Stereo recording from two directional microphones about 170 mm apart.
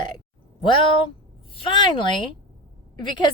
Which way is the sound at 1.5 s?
30° left (ahead or behind).